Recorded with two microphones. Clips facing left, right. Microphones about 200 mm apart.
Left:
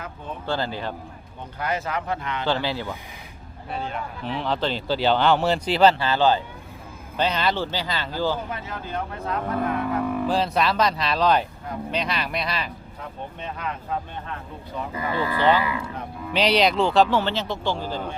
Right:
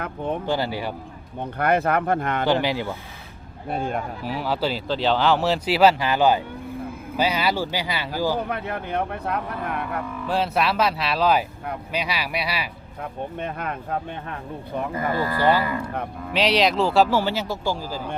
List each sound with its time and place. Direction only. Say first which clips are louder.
0.4 s speech: left 3 dB; 15° right (ahead or behind)
1.4 s speech: right 7 dB; 60° right (ahead or behind)
2.5 s speech: right 2 dB; 15° right (ahead or behind)
3.7 s speech: right 5 dB; 50° right (ahead or behind)
4.2 s speech: left 1 dB; 5° right (ahead or behind)
8.4 s speech: right 4 dB; 60° right (ahead or behind)
10.2 s speech: right 3 dB; 5° right (ahead or behind)
13.0 s speech: right 6 dB; 55° right (ahead or behind)
16.3 s speech: even; centre (ahead or behind)